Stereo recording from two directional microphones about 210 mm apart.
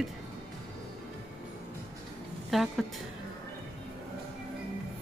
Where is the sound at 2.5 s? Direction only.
Centre (ahead or behind).